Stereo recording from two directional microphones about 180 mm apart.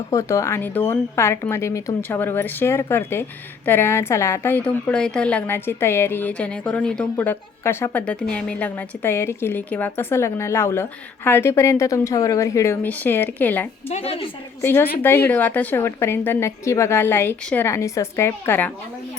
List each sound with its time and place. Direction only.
0.1 s a woman's voice: 15° left (ahead or behind)
13.8 s a woman's voice: 35° left (ahead or behind)
14.6 s a woman's voice: 10° left (ahead or behind)